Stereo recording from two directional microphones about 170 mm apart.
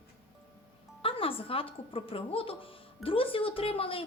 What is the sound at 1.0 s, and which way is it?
Speech, 30° left (ahead or behind).